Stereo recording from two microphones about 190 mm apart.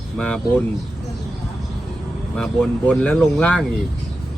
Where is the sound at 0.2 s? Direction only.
5° left (ahead or behind).